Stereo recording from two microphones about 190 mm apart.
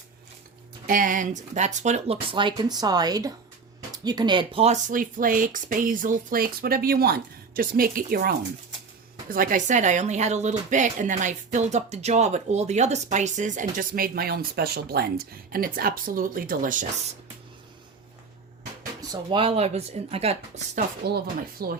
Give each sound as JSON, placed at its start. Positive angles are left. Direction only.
{"t": 0.9, "sound": "speech", "side_deg": -45}
{"t": 9.3, "sound": "speech", "side_deg": -45}
{"t": 19.1, "sound": "speech", "side_deg": -25}
{"t": 21.0, "sound": "speech", "side_deg": -55}